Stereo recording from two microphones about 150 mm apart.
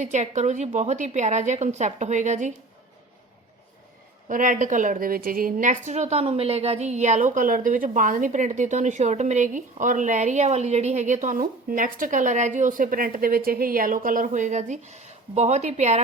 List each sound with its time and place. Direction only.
0.0 s a woman's voice: 50° right (ahead or behind)
4.3 s a woman's voice: 60° right (ahead or behind)